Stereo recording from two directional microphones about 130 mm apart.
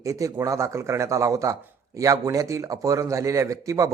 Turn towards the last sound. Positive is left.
turn(degrees=-25)  # may be behind; listen again after turning